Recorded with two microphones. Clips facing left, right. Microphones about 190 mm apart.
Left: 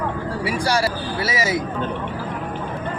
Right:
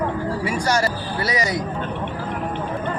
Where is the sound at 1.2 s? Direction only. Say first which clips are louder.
Even; 5° left (ahead or behind).